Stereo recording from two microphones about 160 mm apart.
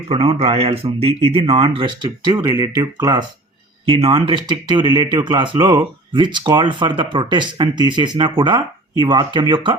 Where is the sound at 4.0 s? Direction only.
35° right (ahead or behind).